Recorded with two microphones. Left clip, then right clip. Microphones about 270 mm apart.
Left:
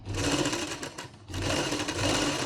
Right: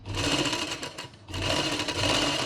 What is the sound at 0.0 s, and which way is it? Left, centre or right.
Sewing machine, centre.